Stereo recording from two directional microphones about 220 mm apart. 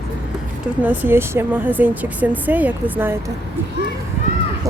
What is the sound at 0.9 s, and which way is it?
Speech, 10° right (ahead or behind).